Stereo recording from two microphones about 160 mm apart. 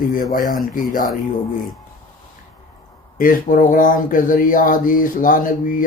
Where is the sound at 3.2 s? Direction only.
60° left (ahead or behind).